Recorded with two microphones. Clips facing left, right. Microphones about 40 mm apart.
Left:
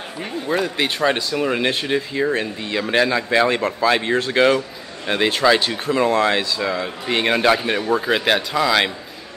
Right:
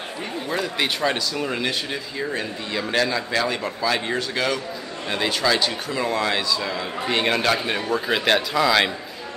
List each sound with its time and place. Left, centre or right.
0.2 s a man's voice: centre
1.6 s a man's voice: left; by 8.9 s centre